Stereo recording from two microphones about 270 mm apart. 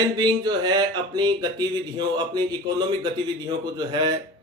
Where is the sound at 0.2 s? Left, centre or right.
Centre.